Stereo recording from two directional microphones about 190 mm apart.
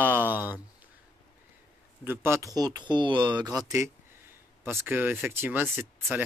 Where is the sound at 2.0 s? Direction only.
15° right (ahead or behind).